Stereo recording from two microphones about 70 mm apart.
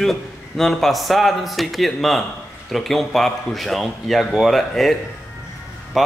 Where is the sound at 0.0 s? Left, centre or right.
Centre.